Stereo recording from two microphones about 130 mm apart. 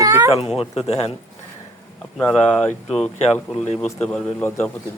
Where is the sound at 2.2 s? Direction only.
10° left (ahead or behind).